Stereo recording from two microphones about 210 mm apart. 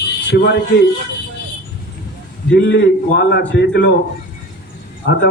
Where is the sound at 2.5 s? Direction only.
55° left (ahead or behind).